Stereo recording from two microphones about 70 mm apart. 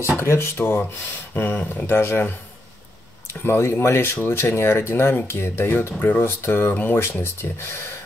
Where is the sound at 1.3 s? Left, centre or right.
Left.